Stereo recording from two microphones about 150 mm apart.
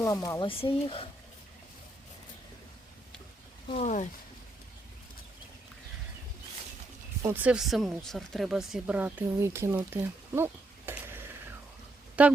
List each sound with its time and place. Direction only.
0.0 s speech: 20° left (ahead or behind)
0.4 s speech: 35° left (ahead or behind)
3.8 s speech: 55° left (ahead or behind)
7.2 s a woman's voice: 15° right (ahead or behind)